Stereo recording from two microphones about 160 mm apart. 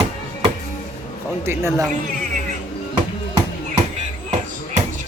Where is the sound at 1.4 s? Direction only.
15° right (ahead or behind).